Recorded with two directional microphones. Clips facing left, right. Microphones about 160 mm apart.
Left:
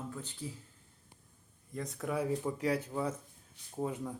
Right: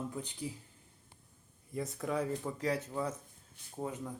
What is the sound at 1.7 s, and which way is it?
Speech, 5° right (ahead or behind).